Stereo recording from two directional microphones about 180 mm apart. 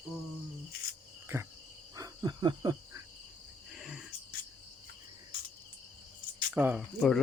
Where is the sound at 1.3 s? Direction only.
15° right (ahead or behind).